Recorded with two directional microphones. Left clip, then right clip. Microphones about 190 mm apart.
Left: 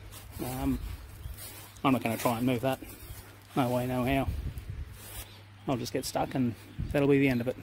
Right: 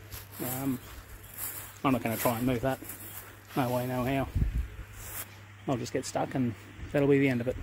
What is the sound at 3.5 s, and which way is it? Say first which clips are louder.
Speech: left 1 dB; 15° left (ahead or behind).